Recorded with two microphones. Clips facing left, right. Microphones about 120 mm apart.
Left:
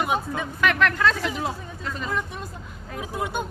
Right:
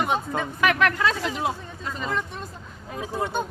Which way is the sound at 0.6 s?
5° right (ahead or behind).